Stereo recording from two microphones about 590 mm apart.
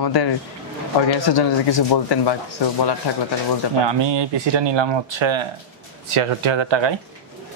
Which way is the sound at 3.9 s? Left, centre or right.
Right.